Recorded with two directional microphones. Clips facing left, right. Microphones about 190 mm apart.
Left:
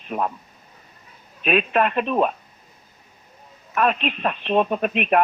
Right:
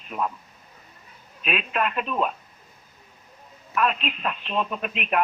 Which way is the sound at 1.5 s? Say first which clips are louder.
Left 7 dB; 50° left (ahead or behind).